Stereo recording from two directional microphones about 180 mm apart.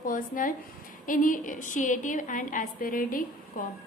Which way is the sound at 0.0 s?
50° left (ahead or behind).